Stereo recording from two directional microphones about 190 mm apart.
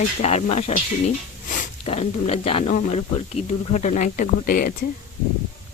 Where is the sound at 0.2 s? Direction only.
35° left (ahead or behind).